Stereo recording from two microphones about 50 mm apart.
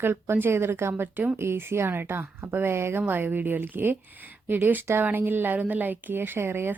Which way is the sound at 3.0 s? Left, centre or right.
Right.